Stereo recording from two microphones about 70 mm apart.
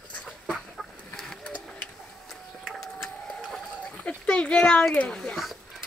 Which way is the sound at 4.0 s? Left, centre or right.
Left.